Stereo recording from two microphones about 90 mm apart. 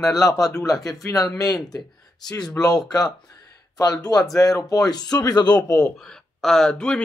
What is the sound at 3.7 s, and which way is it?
Speech, 45° left (ahead or behind).